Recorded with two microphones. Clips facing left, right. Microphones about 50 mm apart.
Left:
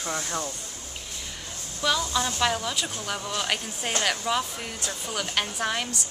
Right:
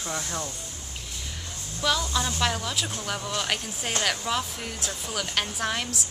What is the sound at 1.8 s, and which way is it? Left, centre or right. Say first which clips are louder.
Speech: left 1 dB; centre.